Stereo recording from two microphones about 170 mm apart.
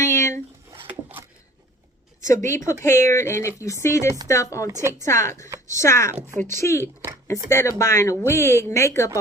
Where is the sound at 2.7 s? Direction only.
15° left (ahead or behind).